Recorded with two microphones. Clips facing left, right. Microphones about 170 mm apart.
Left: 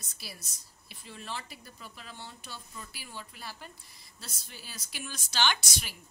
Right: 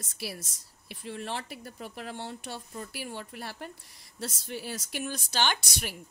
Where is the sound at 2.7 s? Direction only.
55° right (ahead or behind).